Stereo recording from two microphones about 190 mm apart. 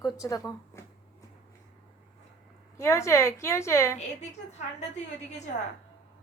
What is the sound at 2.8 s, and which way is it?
A woman's voice, 15° left (ahead or behind).